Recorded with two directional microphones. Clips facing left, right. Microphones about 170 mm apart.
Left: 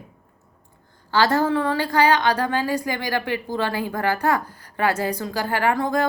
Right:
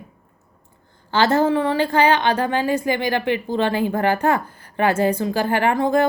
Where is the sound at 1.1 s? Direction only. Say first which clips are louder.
Right 2 dB; 25° right (ahead or behind).